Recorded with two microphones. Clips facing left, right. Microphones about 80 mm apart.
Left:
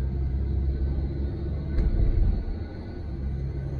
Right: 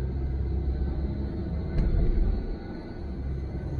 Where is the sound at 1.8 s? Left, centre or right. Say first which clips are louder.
Right 1 dB; right.